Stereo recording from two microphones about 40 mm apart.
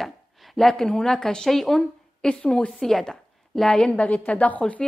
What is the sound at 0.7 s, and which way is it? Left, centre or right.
A woman's voice, centre.